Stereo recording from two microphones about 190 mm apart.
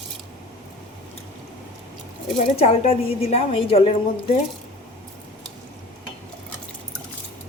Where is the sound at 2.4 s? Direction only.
35° left (ahead or behind).